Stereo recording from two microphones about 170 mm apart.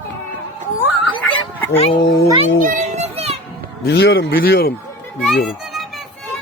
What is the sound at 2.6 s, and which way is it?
Children playing, 50° right (ahead or behind).